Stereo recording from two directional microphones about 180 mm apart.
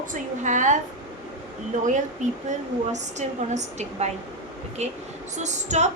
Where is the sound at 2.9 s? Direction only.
40° right (ahead or behind).